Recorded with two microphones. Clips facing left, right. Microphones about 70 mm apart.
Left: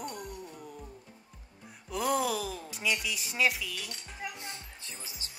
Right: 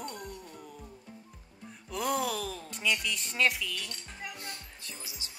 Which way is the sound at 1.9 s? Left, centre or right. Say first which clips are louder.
Left 2 dB; centre.